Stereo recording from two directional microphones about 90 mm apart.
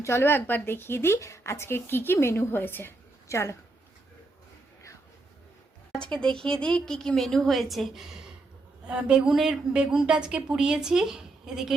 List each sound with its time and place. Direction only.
0.0 s speech: 25° left (ahead or behind)
6.1 s a woman's voice: 10° left (ahead or behind)